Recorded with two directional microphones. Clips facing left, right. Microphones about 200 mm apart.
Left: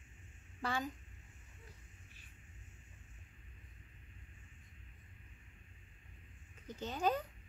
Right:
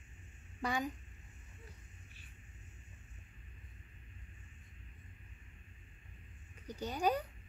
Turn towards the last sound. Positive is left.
turn(degrees=-10)  # may be behind; listen again after turning